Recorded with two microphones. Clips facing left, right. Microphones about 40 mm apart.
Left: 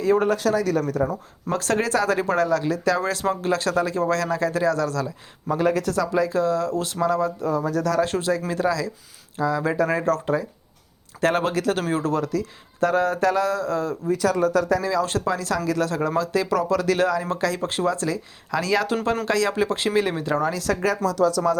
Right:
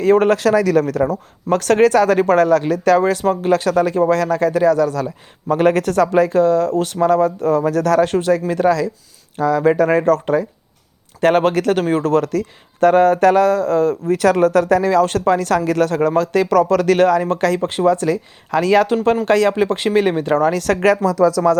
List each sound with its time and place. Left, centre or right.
0.0 s a man's voice: right
0.3 s a man's voice: right
1.0 s speech: right
3.0 s speech: right
5.5 s speech: right
8.0 s speech: right
9.8 s speech: right
11.8 s speech: right
12.0 s speech: right
14.1 s speech: right
15.0 s speech: right
20.7 s a man's voice: right